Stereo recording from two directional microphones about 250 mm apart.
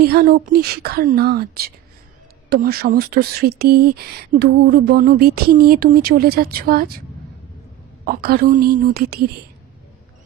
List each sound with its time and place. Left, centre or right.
0.0 s speech: right
8.0 s speech: right